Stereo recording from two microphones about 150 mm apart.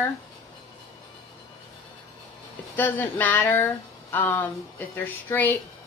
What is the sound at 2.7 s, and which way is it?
A woman's voice, 10° left (ahead or behind).